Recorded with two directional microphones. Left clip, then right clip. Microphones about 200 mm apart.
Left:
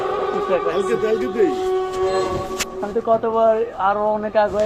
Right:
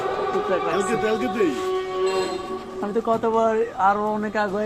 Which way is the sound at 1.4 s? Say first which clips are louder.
Left 5 dB; 20° right (ahead or behind).